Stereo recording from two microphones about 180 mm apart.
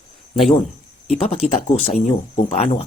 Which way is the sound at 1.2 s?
35° left (ahead or behind).